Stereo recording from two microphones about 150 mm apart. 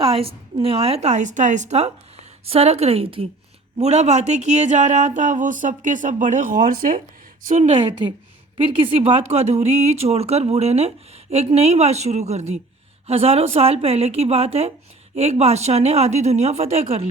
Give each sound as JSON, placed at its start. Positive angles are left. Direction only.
{"t": 0.0, "sound": "a woman's voice", "side_deg": -40}
{"t": 7.4, "sound": "a woman's voice", "side_deg": -50}